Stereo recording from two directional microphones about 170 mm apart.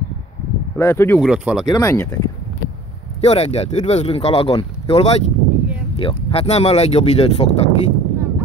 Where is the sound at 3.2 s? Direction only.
40° left (ahead or behind).